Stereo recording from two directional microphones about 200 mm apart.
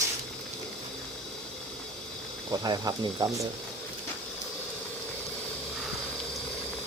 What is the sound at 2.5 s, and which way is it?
Speech, 20° right (ahead or behind).